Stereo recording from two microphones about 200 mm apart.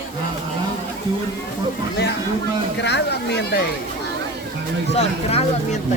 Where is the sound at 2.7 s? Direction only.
60° left (ahead or behind).